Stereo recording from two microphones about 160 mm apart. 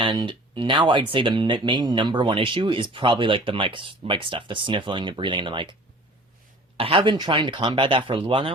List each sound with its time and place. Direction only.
0.0 s speech: 30° right (ahead or behind)
6.7 s speech: 35° right (ahead or behind)